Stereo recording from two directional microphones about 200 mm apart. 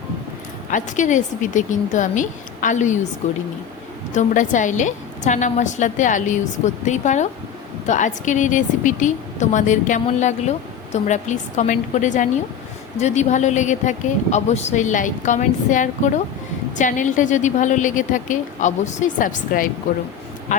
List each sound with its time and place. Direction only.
0.7 s speech: 40° left (ahead or behind)
4.1 s speech: 40° left (ahead or behind)